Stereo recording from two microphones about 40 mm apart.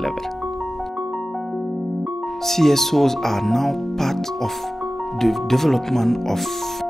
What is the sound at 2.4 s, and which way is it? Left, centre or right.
Speech, centre.